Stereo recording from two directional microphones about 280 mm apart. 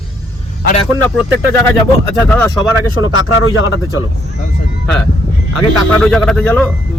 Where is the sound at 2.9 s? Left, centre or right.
Left.